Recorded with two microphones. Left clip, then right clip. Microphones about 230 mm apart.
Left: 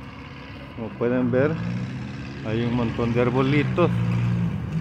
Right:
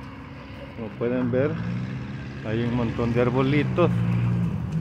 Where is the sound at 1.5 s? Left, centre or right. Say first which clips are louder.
Left 2 dB; left.